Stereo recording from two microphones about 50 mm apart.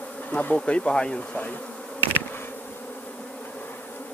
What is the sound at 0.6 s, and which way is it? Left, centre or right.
Speech, left.